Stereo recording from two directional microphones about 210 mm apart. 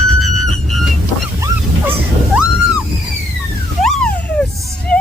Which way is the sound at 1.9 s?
5° right (ahead or behind).